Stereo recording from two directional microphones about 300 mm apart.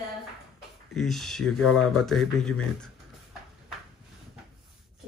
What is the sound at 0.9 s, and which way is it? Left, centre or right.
Speech, centre.